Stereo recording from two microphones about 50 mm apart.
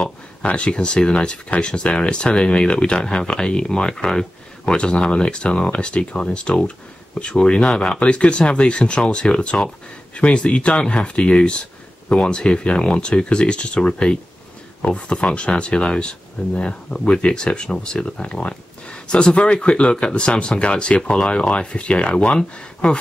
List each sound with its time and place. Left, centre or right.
0.0 s speech: left